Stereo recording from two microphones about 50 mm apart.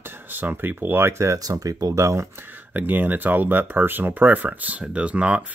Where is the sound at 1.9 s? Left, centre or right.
Right.